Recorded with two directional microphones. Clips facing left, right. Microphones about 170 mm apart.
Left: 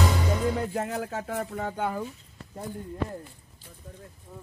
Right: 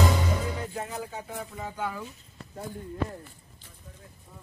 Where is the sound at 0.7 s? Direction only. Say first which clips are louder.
Left 5 dB; 65° left (ahead or behind); by 2.0 s 50° left (ahead or behind).